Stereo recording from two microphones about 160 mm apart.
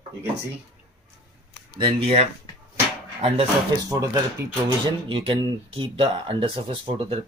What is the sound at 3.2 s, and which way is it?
Speech, 30° right (ahead or behind).